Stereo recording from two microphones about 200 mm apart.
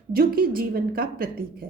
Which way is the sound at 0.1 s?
45° right (ahead or behind).